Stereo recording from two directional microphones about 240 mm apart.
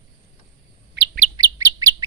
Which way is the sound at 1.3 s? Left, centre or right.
Centre.